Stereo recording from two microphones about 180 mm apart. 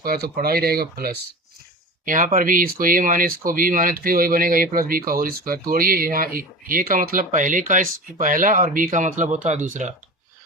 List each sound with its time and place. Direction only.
0.0 s speech: 55° right (ahead or behind)